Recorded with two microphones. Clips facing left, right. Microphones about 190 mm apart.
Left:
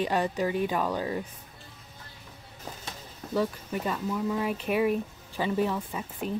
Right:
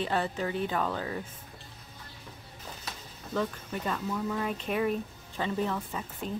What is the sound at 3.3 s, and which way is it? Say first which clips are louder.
Speech: left 3 dB; 10° left (ahead or behind).